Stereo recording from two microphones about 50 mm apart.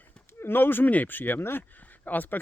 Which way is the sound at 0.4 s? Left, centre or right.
Left.